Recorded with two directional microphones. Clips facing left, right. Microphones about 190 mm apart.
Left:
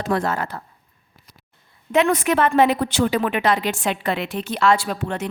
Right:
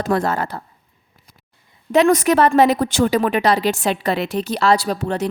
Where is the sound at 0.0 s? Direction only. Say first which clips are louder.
Right 3 dB; 40° right (ahead or behind).